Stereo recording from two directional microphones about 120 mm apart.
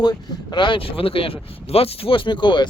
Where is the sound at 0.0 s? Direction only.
35° left (ahead or behind).